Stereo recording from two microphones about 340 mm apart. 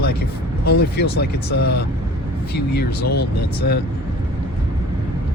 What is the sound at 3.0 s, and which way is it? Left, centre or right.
Speech, left.